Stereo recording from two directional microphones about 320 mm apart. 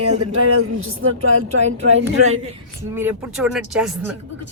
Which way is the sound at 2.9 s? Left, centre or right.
Centre.